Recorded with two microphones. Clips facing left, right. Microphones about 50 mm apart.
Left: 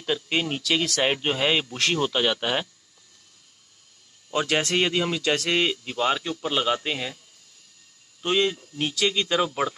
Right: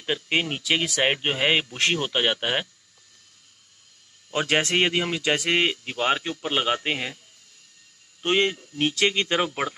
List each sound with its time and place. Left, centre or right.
0.0 s speech: right
4.3 s speech: right
8.2 s speech: right